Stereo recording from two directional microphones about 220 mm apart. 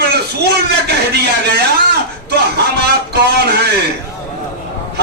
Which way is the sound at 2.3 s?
50° right (ahead or behind).